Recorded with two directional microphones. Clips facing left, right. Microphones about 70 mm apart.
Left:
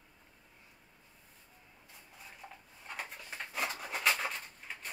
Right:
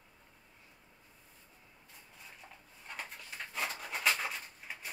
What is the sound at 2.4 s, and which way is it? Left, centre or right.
Dishes, centre.